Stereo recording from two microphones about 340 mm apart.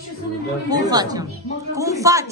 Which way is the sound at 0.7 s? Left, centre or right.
Centre.